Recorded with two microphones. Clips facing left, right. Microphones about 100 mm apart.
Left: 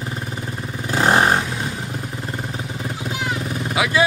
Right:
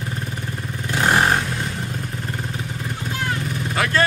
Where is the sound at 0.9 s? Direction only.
30° left (ahead or behind).